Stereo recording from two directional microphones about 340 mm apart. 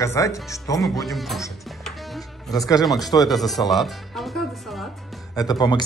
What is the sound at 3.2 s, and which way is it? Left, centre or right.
Speech, centre.